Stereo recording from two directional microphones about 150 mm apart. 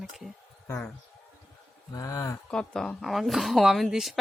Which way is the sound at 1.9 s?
20° left (ahead or behind).